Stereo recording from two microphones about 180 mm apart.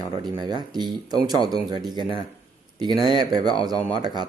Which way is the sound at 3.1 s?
25° right (ahead or behind).